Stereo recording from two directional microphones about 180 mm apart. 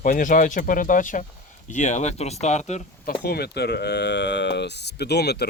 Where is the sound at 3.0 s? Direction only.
60° left (ahead or behind).